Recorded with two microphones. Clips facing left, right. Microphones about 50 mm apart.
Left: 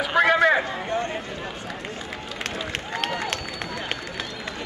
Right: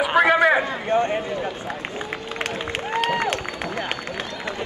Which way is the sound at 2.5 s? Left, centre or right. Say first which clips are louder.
Right 4 dB; right.